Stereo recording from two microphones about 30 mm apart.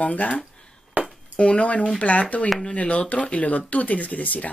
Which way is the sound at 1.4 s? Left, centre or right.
Left.